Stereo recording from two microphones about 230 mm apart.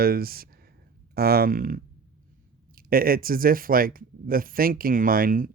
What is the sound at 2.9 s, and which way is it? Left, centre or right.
Speech, right.